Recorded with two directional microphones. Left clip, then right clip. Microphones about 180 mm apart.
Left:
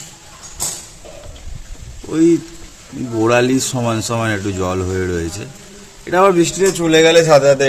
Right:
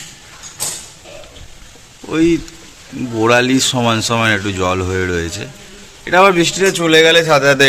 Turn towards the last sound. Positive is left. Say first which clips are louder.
# left 1 dB
turn(degrees=0)  # may be behind; listen again after turning